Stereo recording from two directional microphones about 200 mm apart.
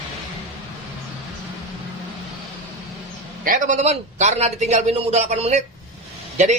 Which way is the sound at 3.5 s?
40° right (ahead or behind).